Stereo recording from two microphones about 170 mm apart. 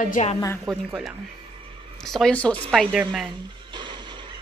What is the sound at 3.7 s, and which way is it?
Music, 25° right (ahead or behind).